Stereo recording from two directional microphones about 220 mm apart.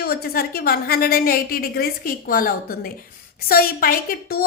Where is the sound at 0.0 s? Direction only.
45° left (ahead or behind).